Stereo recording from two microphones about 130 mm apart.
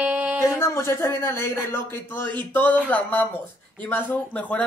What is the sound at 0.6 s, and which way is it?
Speech, 20° left (ahead or behind).